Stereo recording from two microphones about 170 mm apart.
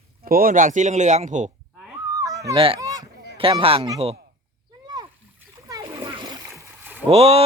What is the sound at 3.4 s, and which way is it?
Speech, 35° right (ahead or behind).